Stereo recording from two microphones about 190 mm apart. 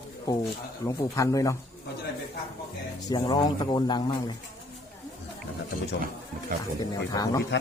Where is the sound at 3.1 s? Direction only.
20° left (ahead or behind).